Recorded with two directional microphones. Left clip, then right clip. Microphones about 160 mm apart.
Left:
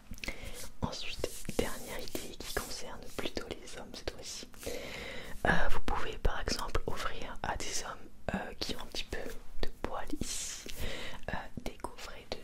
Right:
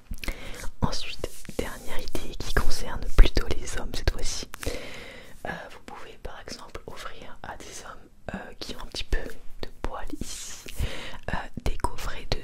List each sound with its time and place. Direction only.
0.2 s whispering: 40° right (ahead or behind)
1.7 s whispering: 20° right (ahead or behind)
2.3 s whispering: 45° right (ahead or behind)
4.9 s a sound: centre (ahead or behind)
5.4 s whispering: 35° left (ahead or behind)
6.9 s whispering: 10° left (ahead or behind); by 8.7 s 10° right (ahead or behind)
8.7 s whispering: 35° right (ahead or behind)
9.6 s whispering: 15° right (ahead or behind)
11.6 s whispering: 55° right (ahead or behind)